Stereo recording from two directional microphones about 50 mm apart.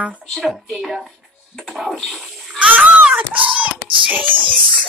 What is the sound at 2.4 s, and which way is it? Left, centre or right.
Water, right.